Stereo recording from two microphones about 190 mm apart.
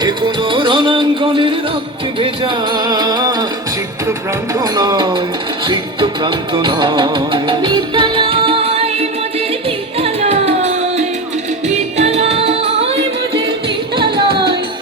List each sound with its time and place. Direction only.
0.0 s music: 25° right (ahead or behind)
4.5 s music: 20° right (ahead or behind)